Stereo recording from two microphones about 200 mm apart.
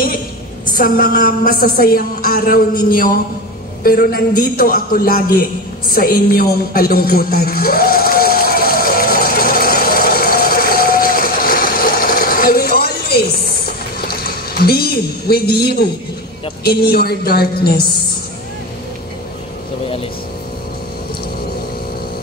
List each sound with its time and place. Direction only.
0.7 s a woman's voice: 45° left (ahead or behind)
3.8 s a sound: 50° left (ahead or behind)
16.6 s a woman's voice: 50° left (ahead or behind)